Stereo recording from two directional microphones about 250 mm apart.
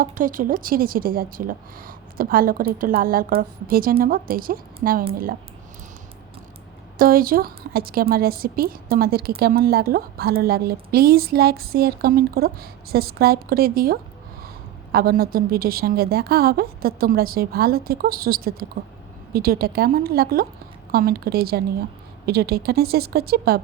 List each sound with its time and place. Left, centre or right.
0.0 s a woman's voice: right
7.0 s a woman's voice: right